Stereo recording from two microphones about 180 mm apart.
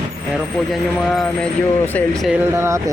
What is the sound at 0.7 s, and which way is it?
Speech, centre (ahead or behind).